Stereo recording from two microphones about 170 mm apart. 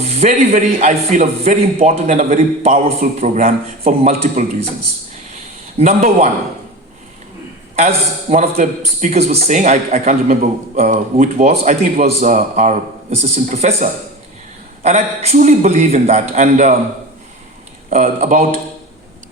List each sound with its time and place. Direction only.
0.0 s a man's voice: 40° right (ahead or behind)
5.8 s speech: 40° right (ahead or behind)
7.8 s a man's voice: 45° right (ahead or behind)
14.8 s a man's voice: 40° right (ahead or behind)
17.9 s a man's voice: 45° right (ahead or behind)